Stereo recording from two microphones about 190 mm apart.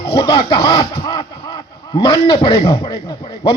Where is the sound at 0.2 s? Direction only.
25° left (ahead or behind).